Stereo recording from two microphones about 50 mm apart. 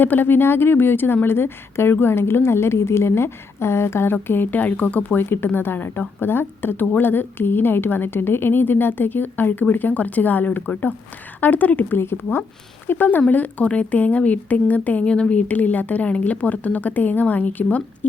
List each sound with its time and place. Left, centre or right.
0.0 s a woman's voice: left
5.2 s a woman's voice: left
11.9 s a woman's voice: left
12.9 s speech: left